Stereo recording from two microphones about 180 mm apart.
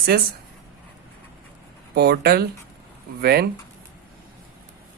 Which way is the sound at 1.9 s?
60° right (ahead or behind).